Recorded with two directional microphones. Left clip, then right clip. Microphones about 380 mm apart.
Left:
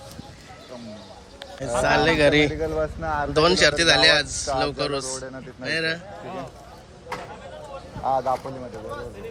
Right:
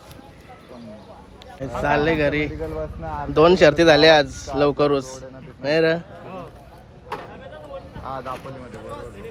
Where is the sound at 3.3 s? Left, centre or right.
Centre.